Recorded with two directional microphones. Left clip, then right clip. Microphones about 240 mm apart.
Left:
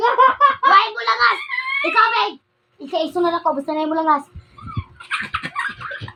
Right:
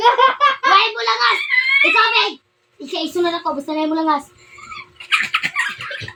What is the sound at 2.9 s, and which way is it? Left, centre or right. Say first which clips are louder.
A woman's voice: left 1 dB; centre.